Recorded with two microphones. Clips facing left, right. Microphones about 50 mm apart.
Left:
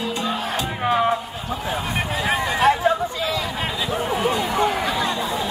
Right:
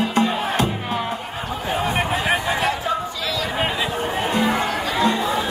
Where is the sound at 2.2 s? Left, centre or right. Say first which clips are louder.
Right 1 dB; right.